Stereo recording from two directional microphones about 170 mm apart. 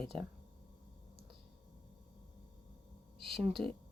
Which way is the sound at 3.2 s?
Centre (ahead or behind).